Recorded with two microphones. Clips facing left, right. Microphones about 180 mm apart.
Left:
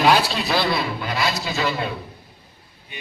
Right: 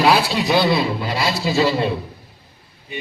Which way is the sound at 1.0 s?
30° right (ahead or behind).